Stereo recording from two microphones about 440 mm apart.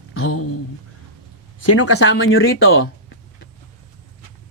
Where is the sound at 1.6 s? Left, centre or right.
Left.